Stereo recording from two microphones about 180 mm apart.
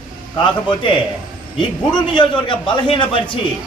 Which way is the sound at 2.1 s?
30° left (ahead or behind).